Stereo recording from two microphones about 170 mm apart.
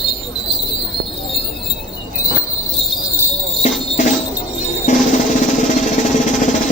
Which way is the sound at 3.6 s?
45° left (ahead or behind).